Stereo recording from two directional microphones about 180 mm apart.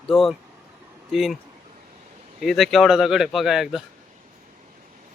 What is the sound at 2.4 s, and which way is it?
Speech, centre (ahead or behind).